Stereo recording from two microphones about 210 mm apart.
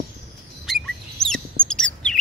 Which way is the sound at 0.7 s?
Centre (ahead or behind).